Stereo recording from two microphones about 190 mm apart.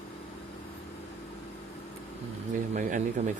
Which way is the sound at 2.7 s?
40° right (ahead or behind).